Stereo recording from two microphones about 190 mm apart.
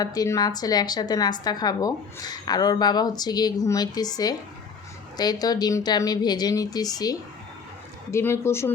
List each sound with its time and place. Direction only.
0.0 s a woman's voice: 20° left (ahead or behind)